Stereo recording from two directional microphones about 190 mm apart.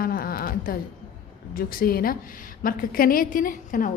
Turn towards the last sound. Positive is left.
turn(degrees=45)  # may be behind; listen again after turning